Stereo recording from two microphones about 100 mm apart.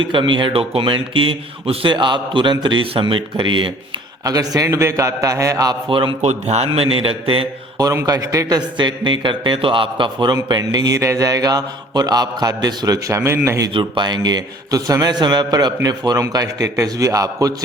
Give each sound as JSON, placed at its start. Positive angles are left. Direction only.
{"t": 0.1, "sound": "speech", "side_deg": -55}
{"t": 4.2, "sound": "mantra", "side_deg": -35}
{"t": 5.9, "sound": "speech", "side_deg": -60}
{"t": 8.0, "sound": "a man's voice", "side_deg": -35}
{"t": 10.5, "sound": "mantra", "side_deg": -40}
{"t": 13.7, "sound": "a man's voice", "side_deg": -50}
{"t": 16.3, "sound": "mantra", "side_deg": -40}